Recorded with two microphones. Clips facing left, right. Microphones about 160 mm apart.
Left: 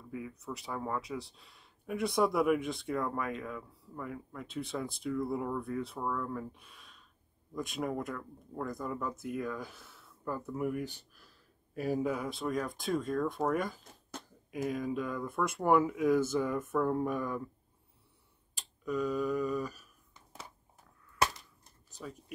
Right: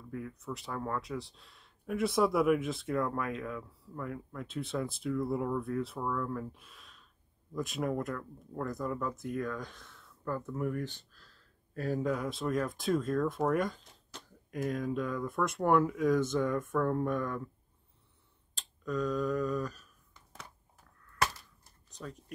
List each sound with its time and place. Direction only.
0.1 s speech: centre (ahead or behind)
18.5 s speech: 10° left (ahead or behind)
21.9 s speech: 5° left (ahead or behind)